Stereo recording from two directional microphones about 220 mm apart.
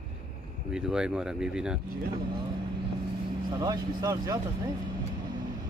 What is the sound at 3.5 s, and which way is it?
Speech, 20° right (ahead or behind).